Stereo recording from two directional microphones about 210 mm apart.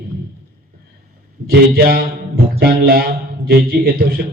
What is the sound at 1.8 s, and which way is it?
A man's voice, 45° right (ahead or behind).